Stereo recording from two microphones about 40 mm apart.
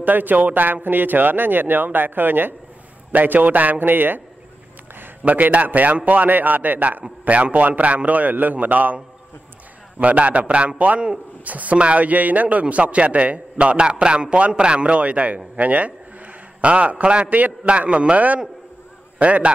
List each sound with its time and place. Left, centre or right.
0.0 s speech: right
5.2 s a man's voice: right